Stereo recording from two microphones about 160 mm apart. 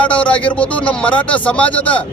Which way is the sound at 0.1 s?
10° left (ahead or behind).